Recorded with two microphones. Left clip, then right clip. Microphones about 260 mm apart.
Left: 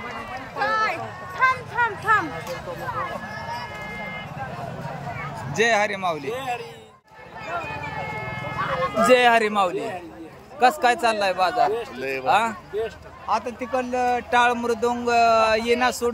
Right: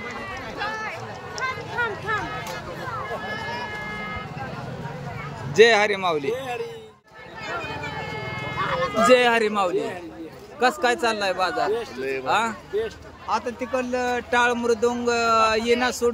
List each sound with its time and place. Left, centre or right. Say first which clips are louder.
0.6 s a sound: left 8 dB; left
5.5 s speech: right 5 dB; centre
8.3 s clip-clop: even; right
8.5 s a sound: even; centre
9.0 s speech: left 1 dB; centre
12.0 s speech: even; left
12.3 s speech: left 3 dB; centre